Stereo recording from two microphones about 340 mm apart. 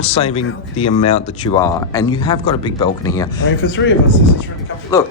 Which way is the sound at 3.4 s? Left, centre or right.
Left.